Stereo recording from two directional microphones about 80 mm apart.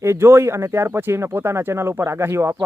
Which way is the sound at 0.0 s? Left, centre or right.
Right.